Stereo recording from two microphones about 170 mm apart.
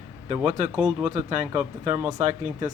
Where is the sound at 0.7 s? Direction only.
5° right (ahead or behind).